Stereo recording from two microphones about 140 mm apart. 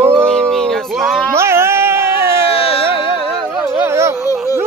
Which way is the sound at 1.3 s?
20° right (ahead or behind).